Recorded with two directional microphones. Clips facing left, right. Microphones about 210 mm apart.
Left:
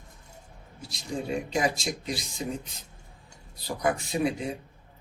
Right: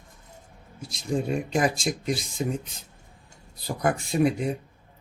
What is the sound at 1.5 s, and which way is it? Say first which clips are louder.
Speech: right 3 dB; 50° right (ahead or behind).